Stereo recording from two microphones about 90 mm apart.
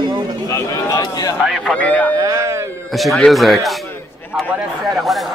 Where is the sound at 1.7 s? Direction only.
15° left (ahead or behind).